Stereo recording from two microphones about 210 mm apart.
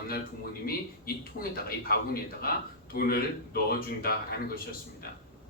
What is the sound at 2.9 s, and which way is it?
Speech, 45° left (ahead or behind).